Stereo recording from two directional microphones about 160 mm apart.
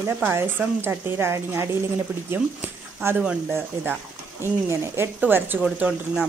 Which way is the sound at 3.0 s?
10° right (ahead or behind).